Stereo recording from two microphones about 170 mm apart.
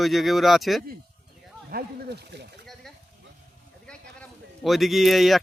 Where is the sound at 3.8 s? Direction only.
5° left (ahead or behind).